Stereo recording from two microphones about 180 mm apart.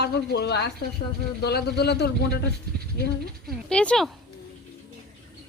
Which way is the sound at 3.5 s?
5° left (ahead or behind).